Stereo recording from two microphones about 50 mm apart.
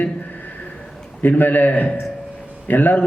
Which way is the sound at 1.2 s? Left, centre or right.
Left.